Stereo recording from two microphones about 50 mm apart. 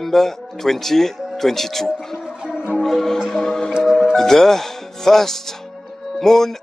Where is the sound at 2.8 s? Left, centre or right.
Centre.